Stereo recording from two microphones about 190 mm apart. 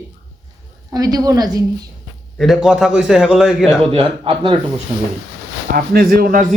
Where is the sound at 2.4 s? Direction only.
Centre (ahead or behind).